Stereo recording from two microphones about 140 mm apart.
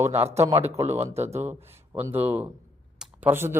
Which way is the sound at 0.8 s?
50° right (ahead or behind).